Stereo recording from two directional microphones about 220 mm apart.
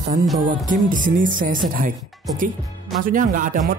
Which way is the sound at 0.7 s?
35° right (ahead or behind).